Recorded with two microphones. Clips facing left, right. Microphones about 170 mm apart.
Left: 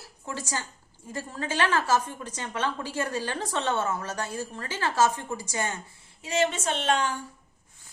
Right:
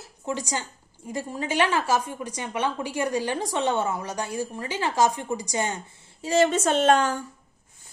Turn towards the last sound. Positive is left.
turn(degrees=-45)  # may be behind; listen again after turning